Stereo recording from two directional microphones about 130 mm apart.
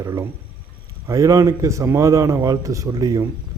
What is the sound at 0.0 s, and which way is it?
A man's voice, 25° right (ahead or behind).